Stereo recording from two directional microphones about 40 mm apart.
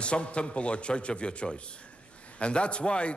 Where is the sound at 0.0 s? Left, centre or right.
Left.